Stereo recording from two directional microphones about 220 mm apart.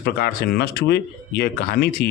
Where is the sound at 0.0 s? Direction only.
45° left (ahead or behind).